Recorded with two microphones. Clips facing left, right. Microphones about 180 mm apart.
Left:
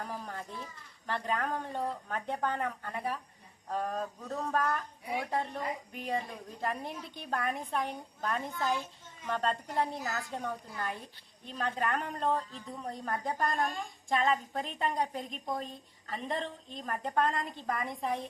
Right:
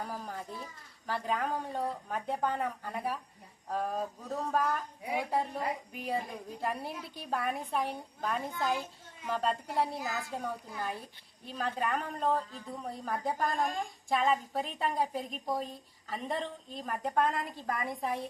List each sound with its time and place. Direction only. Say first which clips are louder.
0.0 s a woman's voice: right 1 dB; 5° right (ahead or behind)
5.9 s a woman's voice: even; 5° right (ahead or behind)